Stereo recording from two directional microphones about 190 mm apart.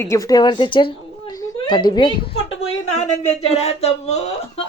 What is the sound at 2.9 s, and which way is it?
A woman's voice, 35° left (ahead or behind).